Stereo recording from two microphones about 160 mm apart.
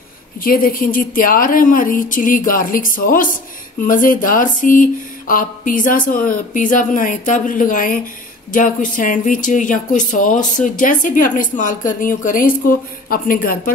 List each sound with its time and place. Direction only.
0.4 s speech: 60° left (ahead or behind)